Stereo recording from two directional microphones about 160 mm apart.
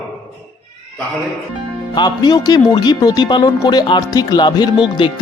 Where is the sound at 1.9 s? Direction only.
25° left (ahead or behind).